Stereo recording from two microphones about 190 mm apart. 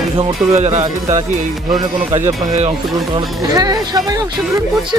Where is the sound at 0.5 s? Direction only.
35° right (ahead or behind).